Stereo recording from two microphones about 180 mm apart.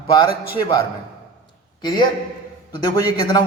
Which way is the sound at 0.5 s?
25° left (ahead or behind).